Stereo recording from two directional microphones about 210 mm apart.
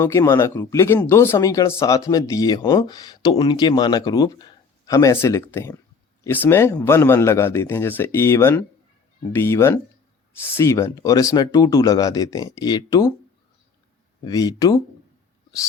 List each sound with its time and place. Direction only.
0.0 s speech: 10° left (ahead or behind)
14.3 s speech: 15° left (ahead or behind)